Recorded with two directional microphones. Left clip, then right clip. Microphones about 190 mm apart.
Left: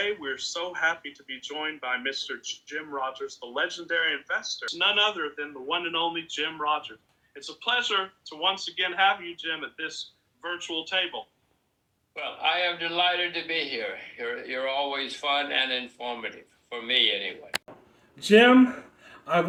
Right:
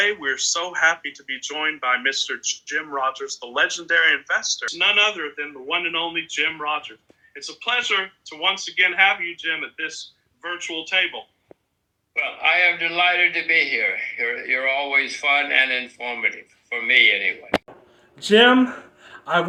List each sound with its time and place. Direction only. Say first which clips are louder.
0.0 s speech: right 9 dB; 20° right (ahead or behind)
4.7 s a man's voice: right 5 dB; 5° right (ahead or behind)
18.2 s speech: right 3 dB; 10° left (ahead or behind)